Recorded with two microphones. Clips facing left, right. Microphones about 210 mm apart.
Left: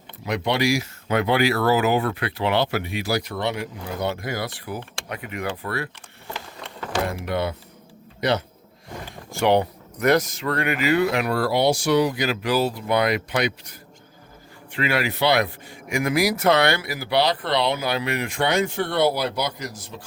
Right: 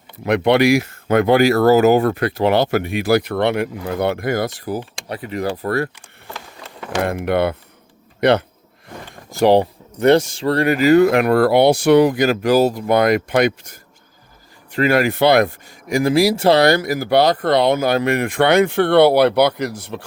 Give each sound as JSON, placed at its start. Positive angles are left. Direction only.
{"t": 0.3, "sound": "speech", "side_deg": -60}
{"t": 6.6, "sound": "a sound", "side_deg": -5}
{"t": 7.0, "sound": "speech", "side_deg": -60}
{"t": 9.3, "sound": "speech", "side_deg": -35}
{"t": 15.9, "sound": "speech", "side_deg": -35}